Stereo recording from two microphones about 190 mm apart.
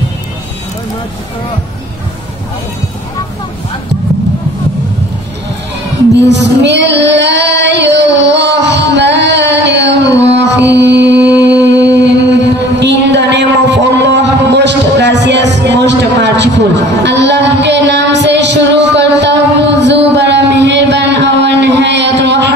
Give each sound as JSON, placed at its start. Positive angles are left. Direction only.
{"t": 6.1, "sound": "female singing", "side_deg": -65}
{"t": 10.3, "sound": "music", "side_deg": -65}
{"t": 11.6, "sound": "a sound", "side_deg": -65}